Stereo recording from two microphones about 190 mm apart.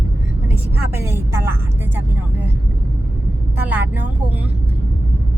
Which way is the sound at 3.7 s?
10° right (ahead or behind).